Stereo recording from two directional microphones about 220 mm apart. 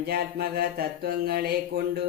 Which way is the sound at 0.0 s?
45° right (ahead or behind).